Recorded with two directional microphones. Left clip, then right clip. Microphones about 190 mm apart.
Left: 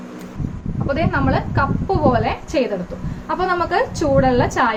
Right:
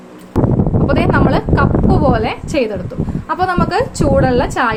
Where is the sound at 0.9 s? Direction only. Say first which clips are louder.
Right 4 dB; 50° right (ahead or behind).